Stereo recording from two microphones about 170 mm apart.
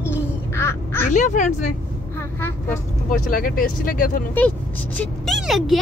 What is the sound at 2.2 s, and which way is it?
Vehicle, 10° left (ahead or behind).